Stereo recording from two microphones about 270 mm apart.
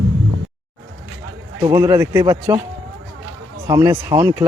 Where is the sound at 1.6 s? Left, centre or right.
Centre.